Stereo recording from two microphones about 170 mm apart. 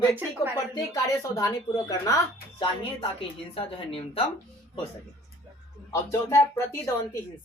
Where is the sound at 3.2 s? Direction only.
35° left (ahead or behind).